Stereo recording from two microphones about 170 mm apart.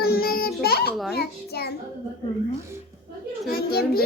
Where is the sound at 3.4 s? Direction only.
65° left (ahead or behind).